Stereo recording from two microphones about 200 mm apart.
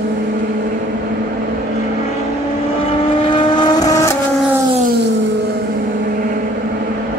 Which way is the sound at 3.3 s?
20° left (ahead or behind).